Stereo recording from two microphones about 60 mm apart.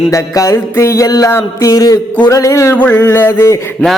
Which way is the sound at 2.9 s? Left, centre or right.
Left.